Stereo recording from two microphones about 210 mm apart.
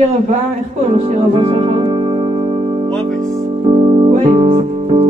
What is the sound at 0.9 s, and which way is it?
Music, 30° right (ahead or behind).